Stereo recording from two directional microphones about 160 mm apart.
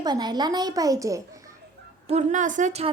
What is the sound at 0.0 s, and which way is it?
Speech, 25° right (ahead or behind).